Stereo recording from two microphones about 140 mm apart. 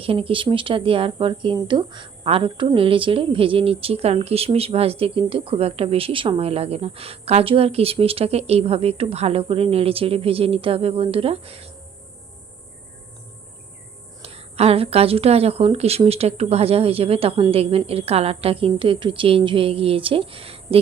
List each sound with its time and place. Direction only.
0.0 s speech: 40° right (ahead or behind)
14.2 s speech: 45° right (ahead or behind)